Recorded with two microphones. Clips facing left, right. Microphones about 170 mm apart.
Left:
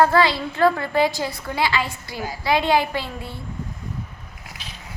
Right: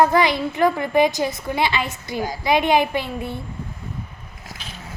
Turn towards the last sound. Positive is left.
turn(degrees=-20)  # may be behind; listen again after turning